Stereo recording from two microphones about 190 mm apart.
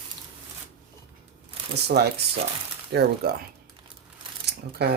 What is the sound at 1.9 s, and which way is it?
Speech, 60° right (ahead or behind).